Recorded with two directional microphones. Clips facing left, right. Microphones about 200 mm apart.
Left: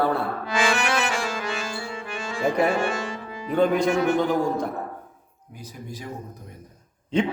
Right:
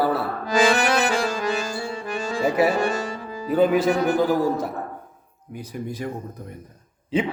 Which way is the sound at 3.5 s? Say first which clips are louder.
Right 2 dB; 5° right (ahead or behind).